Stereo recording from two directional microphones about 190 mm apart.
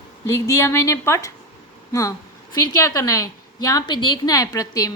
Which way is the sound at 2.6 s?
20° left (ahead or behind).